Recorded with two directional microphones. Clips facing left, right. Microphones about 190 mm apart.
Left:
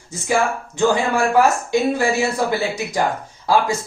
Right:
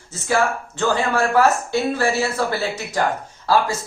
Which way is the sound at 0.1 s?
15° left (ahead or behind).